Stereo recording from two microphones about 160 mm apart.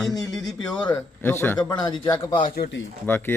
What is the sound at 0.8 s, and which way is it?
Speech, 15° left (ahead or behind).